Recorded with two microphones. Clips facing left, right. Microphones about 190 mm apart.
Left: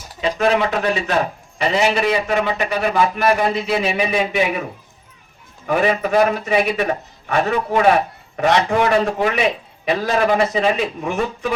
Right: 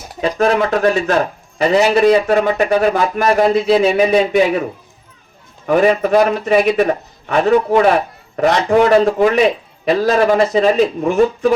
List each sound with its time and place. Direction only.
0.2 s a man's voice: 45° right (ahead or behind)
5.6 s a man's voice: 40° right (ahead or behind)